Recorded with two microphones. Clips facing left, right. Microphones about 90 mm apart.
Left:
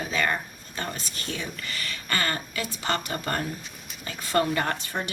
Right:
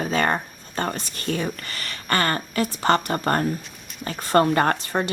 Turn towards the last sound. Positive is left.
turn(degrees=-45)  # may be behind; listen again after turning